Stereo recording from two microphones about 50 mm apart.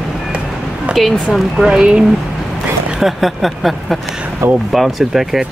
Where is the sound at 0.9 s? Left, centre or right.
Right.